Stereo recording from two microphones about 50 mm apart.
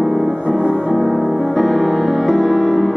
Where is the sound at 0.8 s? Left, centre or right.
Centre.